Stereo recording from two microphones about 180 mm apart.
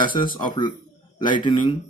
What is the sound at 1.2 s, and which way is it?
Speech, 25° left (ahead or behind).